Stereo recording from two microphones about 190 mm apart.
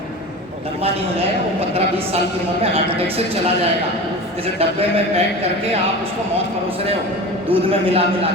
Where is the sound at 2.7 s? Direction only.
30° right (ahead or behind).